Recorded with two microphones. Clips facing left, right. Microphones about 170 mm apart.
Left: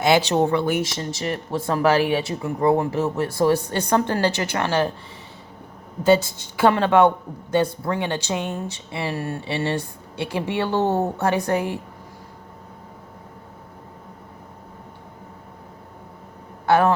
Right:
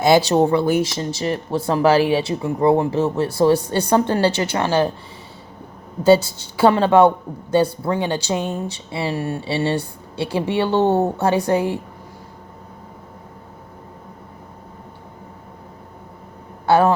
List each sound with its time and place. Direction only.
0.0 s speech: 40° right (ahead or behind)
6.0 s speech: 35° right (ahead or behind)
16.6 s a woman's voice: 30° right (ahead or behind)